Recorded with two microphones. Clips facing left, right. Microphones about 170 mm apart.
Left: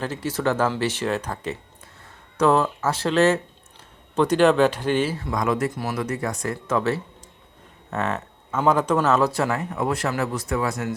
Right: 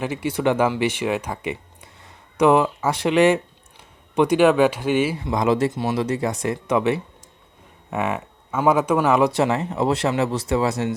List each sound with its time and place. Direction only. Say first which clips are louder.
0.0 s speech: right 3 dB; 15° right (ahead or behind)